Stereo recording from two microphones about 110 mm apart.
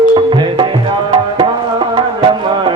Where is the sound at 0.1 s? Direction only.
50° right (ahead or behind).